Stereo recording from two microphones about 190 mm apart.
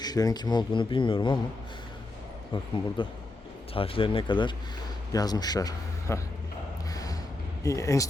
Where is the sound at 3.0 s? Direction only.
25° left (ahead or behind).